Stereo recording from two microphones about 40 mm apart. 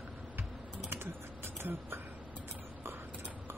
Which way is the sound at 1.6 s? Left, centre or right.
Right.